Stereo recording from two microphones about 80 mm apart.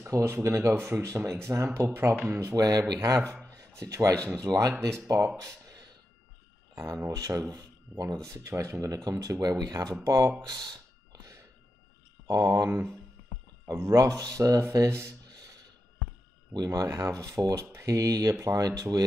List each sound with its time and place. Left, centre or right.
0.1 s speech: right
2.5 s speech: right
5.4 s a sound: right
7.1 s speech: right
12.3 s speech: right
15.2 s a sound: right
16.5 s speech: right